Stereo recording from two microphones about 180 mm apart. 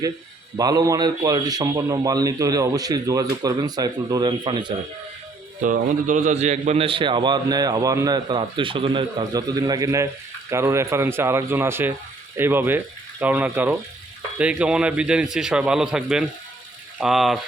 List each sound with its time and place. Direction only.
0.5 s a man's voice: 20° right (ahead or behind)
5.6 s a man's voice: 45° right (ahead or behind); by 17.4 s centre (ahead or behind)